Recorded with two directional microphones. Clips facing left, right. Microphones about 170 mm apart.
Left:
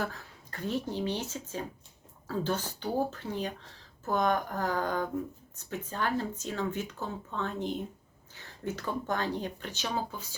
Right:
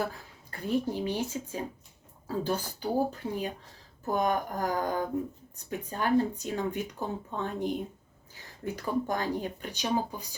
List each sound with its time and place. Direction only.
0.0 s speech: 10° right (ahead or behind)